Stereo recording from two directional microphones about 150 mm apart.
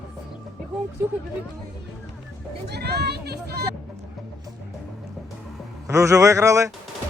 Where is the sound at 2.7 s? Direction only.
90° right.